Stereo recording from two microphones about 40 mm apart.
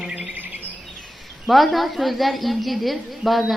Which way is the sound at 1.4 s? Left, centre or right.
Centre.